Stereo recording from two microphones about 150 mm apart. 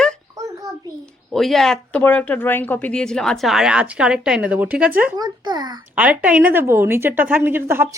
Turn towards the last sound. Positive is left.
turn(degrees=-15)  # may be behind; listen again after turning